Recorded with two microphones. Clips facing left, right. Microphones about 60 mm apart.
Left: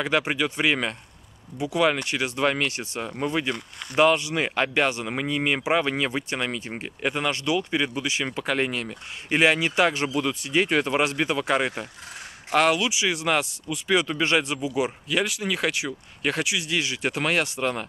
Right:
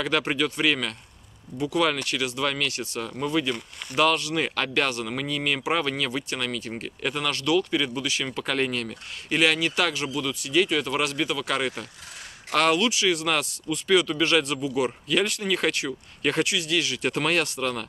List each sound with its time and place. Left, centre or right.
0.0 s speech: centre
16.5 s speech: left
17.1 s speech: centre